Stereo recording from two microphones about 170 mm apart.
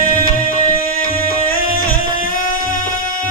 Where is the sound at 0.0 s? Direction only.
55° left (ahead or behind).